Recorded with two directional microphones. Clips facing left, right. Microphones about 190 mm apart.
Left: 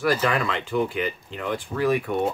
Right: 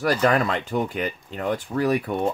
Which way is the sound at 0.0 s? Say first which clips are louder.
Right 2 dB; 40° right (ahead or behind).